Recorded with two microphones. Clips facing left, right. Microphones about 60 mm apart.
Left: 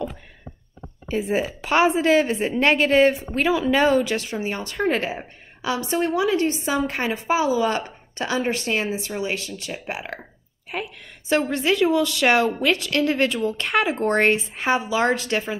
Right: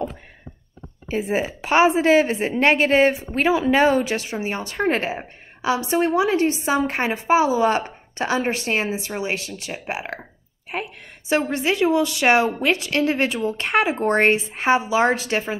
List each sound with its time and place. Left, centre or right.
1.1 s a woman's voice: right